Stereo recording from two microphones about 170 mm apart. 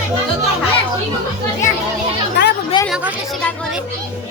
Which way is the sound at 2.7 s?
25° left (ahead or behind).